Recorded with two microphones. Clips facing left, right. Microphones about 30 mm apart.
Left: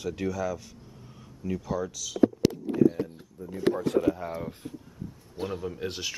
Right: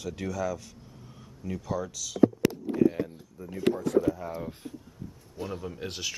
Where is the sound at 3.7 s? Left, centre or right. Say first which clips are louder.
Even; left.